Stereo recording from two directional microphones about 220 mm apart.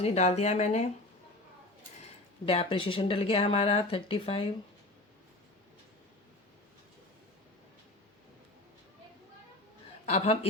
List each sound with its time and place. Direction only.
0.0 s speech: 30° left (ahead or behind)
2.5 s speech: 25° left (ahead or behind)
10.1 s speech: 25° left (ahead or behind)